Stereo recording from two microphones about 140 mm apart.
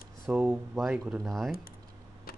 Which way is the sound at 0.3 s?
10° right (ahead or behind).